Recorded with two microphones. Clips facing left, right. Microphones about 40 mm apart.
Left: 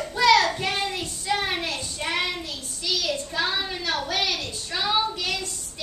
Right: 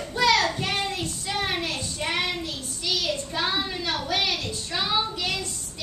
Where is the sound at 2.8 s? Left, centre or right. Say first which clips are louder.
Left 1 dB; centre.